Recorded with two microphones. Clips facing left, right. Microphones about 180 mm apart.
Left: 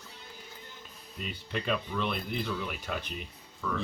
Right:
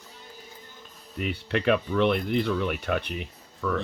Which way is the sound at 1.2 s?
70° right (ahead or behind).